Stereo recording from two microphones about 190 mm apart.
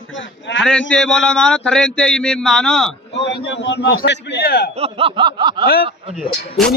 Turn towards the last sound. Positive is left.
turn(degrees=5)  # may be behind; listen again after turning